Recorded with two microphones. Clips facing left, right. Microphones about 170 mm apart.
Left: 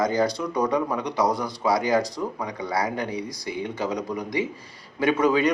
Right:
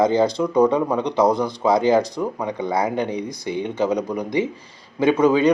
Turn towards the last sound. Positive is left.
turn(degrees=-20)  # may be behind; listen again after turning